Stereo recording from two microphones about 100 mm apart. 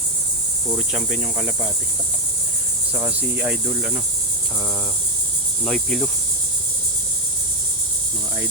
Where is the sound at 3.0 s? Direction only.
15° right (ahead or behind).